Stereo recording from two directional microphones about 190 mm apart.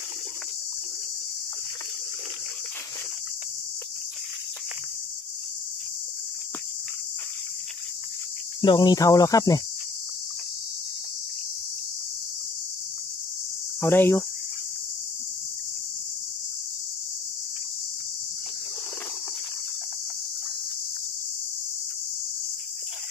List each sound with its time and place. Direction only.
8.5 s cricket: 20° left (ahead or behind)
13.7 s speech: 10° left (ahead or behind)